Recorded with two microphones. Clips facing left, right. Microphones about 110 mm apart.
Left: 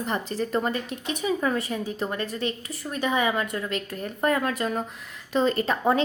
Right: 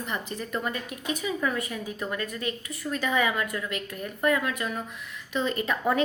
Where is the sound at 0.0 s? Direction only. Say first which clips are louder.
Left 5 dB; 35° left (ahead or behind).